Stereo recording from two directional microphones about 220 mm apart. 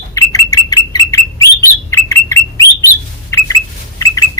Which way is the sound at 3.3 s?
15° left (ahead or behind).